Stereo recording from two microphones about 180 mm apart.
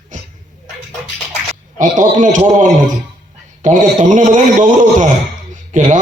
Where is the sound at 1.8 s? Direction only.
45° right (ahead or behind).